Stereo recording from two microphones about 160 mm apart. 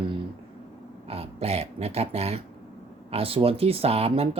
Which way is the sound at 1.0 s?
35° right (ahead or behind).